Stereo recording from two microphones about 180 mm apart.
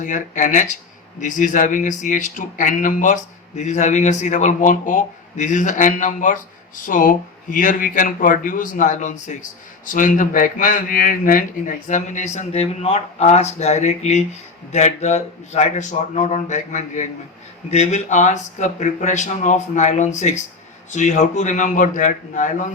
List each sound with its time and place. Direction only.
0.0 s speech: 45° left (ahead or behind)